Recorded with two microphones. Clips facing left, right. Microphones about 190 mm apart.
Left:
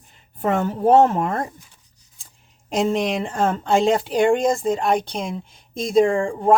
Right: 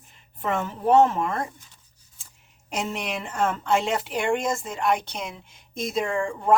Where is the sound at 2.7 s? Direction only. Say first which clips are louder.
Left 9 dB; 30° left (ahead or behind).